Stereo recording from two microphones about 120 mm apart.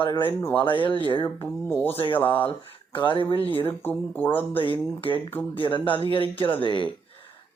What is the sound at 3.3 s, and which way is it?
Speech, 50° left (ahead or behind).